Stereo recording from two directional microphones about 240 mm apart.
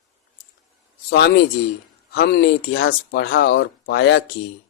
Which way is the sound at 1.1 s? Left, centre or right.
Left.